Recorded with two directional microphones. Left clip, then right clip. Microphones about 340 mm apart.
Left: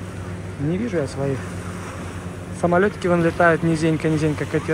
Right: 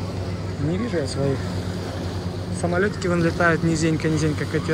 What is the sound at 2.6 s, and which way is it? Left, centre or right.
Speech, centre.